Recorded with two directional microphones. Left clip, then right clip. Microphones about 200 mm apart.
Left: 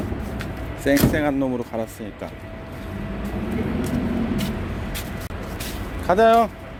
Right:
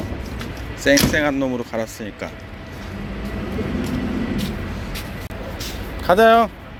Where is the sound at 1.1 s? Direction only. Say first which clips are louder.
Right 3 dB; 10° left (ahead or behind).